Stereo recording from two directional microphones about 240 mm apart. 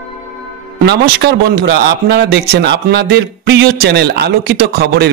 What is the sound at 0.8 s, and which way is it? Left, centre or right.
A man's voice, right.